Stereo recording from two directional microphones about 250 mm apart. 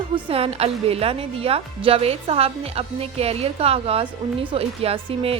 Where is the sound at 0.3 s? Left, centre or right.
Right.